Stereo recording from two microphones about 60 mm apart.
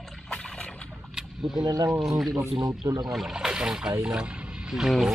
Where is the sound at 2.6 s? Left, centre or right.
Right.